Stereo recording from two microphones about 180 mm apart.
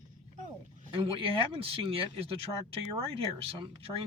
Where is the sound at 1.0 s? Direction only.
30° right (ahead or behind).